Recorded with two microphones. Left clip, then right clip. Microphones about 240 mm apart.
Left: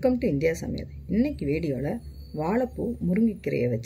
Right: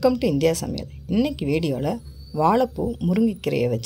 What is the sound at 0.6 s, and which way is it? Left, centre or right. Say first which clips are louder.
Speech: right 5 dB; right.